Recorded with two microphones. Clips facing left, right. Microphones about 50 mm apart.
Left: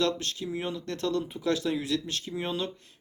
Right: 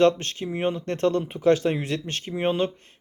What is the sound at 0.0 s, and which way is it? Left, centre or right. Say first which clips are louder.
Speech: right 8 dB; right.